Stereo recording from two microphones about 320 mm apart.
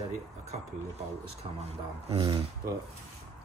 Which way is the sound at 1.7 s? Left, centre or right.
Centre.